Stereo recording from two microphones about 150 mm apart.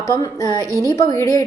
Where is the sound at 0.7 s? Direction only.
20° right (ahead or behind).